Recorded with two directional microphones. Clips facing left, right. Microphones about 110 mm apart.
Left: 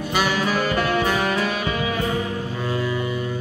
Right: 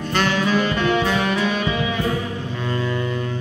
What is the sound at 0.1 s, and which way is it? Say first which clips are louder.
Music: right 2 dB; 10° left (ahead or behind).